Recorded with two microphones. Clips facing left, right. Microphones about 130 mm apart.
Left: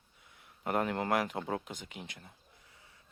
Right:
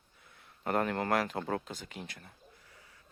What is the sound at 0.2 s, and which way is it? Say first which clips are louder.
Speech: even; 15° left (ahead or behind).